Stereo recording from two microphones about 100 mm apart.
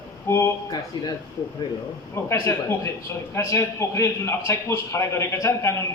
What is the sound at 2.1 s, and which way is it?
A man's voice, 30° left (ahead or behind).